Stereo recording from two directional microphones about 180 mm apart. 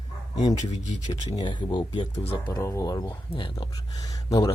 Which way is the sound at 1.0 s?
25° left (ahead or behind).